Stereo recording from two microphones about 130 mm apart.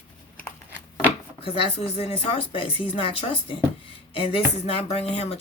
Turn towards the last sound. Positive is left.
turn(degrees=55)  # may be behind; listen again after turning